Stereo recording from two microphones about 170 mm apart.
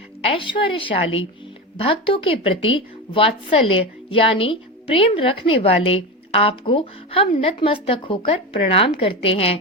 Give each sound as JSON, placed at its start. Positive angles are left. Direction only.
{"t": 0.3, "sound": "a woman's voice", "side_deg": 30}